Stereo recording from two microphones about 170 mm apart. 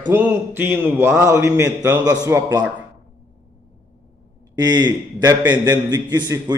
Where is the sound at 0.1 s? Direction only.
10° right (ahead or behind).